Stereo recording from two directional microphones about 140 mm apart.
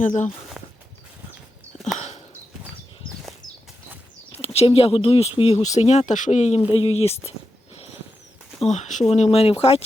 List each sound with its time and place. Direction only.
0.0 s speech: 65° left (ahead or behind)
0.3 s a sound: centre (ahead or behind)
2.0 s a sound: 55° left (ahead or behind)
4.4 s speech: 45° left (ahead or behind)
6.7 s speech: 45° left (ahead or behind)
8.6 s speech: 55° left (ahead or behind)